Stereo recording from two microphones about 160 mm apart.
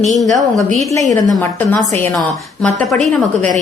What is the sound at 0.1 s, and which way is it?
Speech, centre (ahead or behind).